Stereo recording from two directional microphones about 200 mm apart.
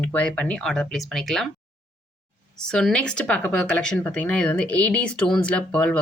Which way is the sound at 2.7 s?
5° left (ahead or behind).